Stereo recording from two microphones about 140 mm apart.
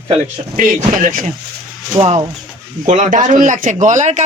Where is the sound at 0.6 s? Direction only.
75° right (ahead or behind).